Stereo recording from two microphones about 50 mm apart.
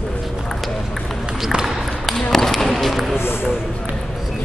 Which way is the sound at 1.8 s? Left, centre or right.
Centre.